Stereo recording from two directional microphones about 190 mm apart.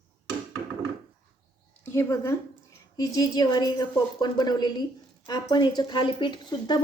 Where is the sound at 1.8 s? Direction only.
15° left (ahead or behind).